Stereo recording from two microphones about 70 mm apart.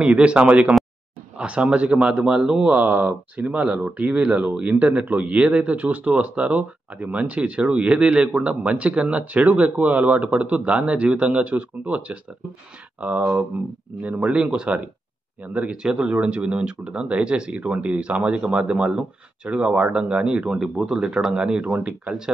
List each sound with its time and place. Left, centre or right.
0.0 s speech: centre